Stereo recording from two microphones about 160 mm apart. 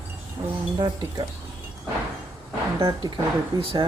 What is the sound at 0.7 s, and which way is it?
Speech, 30° right (ahead or behind).